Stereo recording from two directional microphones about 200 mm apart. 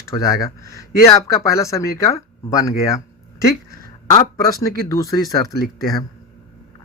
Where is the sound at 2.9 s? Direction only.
15° left (ahead or behind).